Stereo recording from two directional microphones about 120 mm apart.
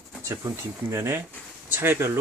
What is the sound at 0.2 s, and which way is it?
Speech, 25° right (ahead or behind).